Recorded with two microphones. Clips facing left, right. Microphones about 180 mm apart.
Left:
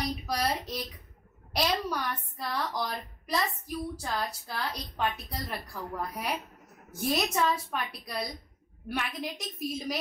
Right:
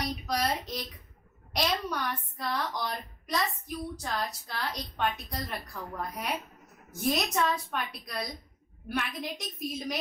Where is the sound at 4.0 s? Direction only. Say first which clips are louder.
Even; 5° left (ahead or behind).